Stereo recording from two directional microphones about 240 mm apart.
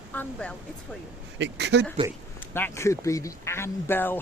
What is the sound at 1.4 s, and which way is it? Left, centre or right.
Speech, right.